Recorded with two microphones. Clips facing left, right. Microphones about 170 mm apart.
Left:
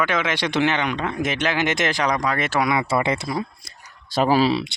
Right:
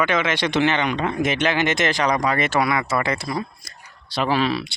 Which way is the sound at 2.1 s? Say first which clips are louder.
Right 2 dB; 5° right (ahead or behind).